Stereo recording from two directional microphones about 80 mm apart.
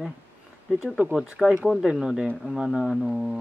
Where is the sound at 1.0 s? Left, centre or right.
Centre.